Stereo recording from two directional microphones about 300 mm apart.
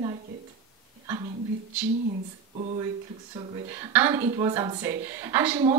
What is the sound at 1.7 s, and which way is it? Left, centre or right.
Speech, centre.